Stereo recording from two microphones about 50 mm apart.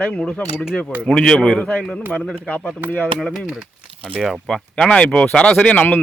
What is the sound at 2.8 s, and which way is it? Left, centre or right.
Speech, right.